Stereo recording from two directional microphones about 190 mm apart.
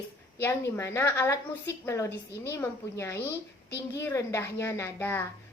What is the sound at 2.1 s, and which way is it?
Speech, 65° left (ahead or behind).